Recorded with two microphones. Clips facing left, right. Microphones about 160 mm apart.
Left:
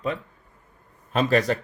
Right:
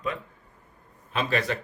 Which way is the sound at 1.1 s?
40° left (ahead or behind).